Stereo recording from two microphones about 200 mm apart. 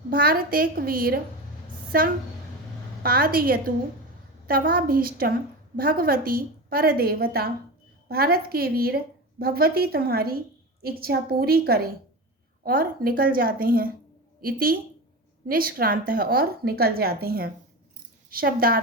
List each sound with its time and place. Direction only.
0.1 s a woman's voice: 45° right (ahead or behind)